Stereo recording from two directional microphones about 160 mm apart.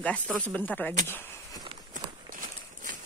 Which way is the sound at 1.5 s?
30° right (ahead or behind).